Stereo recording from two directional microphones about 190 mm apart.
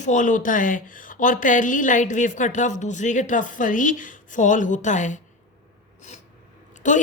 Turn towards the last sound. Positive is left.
turn(degrees=40)  # may be behind; listen again after turning